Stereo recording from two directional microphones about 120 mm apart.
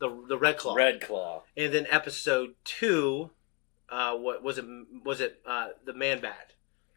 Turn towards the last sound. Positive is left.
turn(degrees=10)  # may be behind; listen again after turning